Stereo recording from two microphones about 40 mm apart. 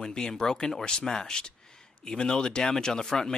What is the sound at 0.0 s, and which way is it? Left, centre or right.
Speech, centre.